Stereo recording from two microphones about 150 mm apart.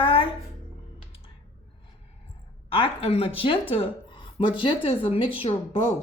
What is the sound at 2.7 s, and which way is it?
A woman's voice, 40° left (ahead or behind).